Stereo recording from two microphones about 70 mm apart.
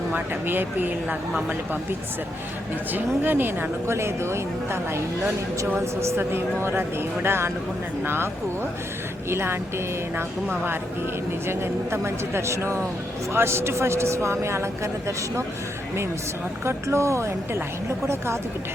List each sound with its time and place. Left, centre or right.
0.1 s speech: right
2.9 s a woman's voice: right
9.3 s a woman's voice: right
16.6 s a woman's voice: right